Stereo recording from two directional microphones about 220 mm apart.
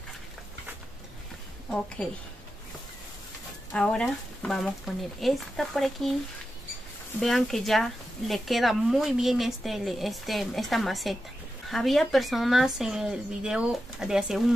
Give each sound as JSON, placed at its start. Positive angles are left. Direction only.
{"t": 3.7, "sound": "speech", "side_deg": 5}
{"t": 7.2, "sound": "speech", "side_deg": 0}